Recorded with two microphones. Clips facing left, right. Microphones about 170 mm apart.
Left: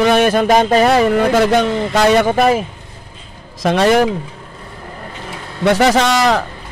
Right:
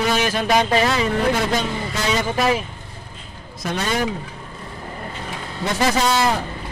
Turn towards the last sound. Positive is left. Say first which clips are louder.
# left 5 dB
turn(degrees=90)